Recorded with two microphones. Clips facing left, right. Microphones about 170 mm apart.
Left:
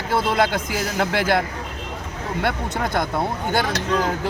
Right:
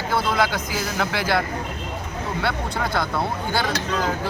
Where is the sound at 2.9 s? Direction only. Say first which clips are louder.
Left 2 dB; 20° left (ahead or behind).